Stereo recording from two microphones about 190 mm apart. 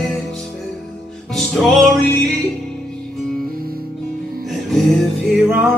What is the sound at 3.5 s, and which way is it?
Music, 50° right (ahead or behind).